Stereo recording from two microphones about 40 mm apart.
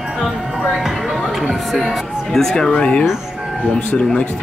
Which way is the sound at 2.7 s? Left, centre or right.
Left.